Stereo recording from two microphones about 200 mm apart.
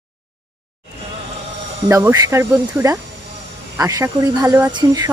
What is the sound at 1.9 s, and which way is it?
Speech, 15° right (ahead or behind).